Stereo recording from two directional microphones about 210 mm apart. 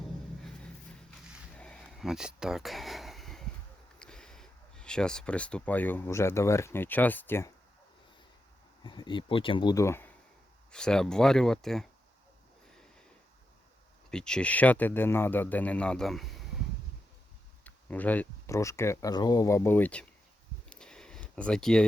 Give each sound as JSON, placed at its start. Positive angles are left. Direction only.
{"t": 1.5, "sound": "a sound", "side_deg": 5}
{"t": 4.0, "sound": "speech", "side_deg": 5}
{"t": 8.8, "sound": "speech", "side_deg": 20}
{"t": 14.1, "sound": "a man's voice", "side_deg": 5}
{"t": 17.6, "sound": "speech", "side_deg": 5}
{"t": 20.7, "sound": "a sound", "side_deg": 5}